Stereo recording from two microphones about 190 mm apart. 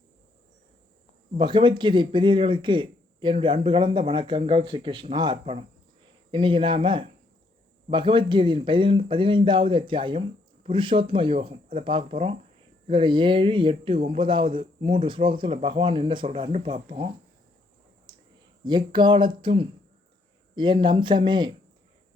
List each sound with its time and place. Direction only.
1.3 s speech: 25° right (ahead or behind)
18.1 s clicking: 20° right (ahead or behind)
18.6 s speech: 25° right (ahead or behind)